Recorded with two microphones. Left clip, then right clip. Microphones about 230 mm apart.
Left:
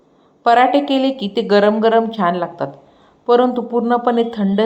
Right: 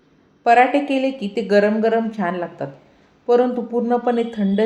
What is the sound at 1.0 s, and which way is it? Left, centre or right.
Speech, centre.